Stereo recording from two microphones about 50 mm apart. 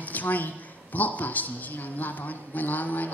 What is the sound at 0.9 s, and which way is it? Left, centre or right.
A man's voice, left.